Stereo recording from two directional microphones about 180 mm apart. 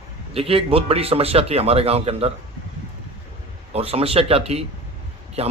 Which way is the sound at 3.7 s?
30° right (ahead or behind).